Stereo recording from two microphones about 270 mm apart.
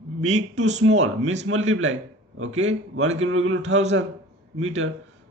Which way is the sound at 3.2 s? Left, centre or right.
Right.